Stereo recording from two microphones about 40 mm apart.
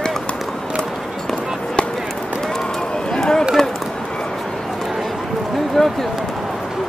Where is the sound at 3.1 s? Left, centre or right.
Centre.